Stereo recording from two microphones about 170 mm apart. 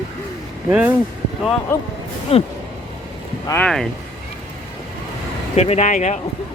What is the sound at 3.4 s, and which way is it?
Speech, 15° left (ahead or behind).